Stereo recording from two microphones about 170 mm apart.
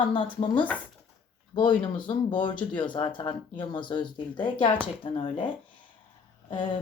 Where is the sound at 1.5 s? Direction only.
30° left (ahead or behind).